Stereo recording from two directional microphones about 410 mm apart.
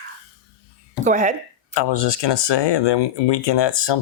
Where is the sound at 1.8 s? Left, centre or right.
Left.